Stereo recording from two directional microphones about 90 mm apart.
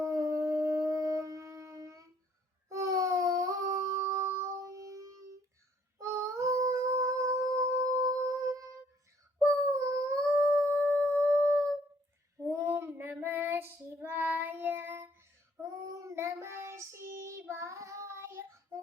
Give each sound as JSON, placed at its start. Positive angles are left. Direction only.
{"t": 0.0, "sound": "wind instrument", "side_deg": -40}
{"t": 2.6, "sound": "humming", "side_deg": -40}
{"t": 6.0, "sound": "a sound", "side_deg": -35}
{"t": 10.4, "sound": "howl", "side_deg": 10}
{"t": 10.9, "sound": "singing bowl", "side_deg": 15}
{"t": 12.4, "sound": "child singing", "side_deg": -30}
{"t": 15.6, "sound": "child singing", "side_deg": -35}